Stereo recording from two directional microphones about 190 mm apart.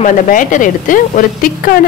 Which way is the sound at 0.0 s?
45° left (ahead or behind).